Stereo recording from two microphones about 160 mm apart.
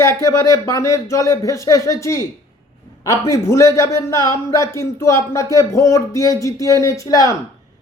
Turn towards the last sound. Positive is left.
turn(degrees=20)  # may be behind; listen again after turning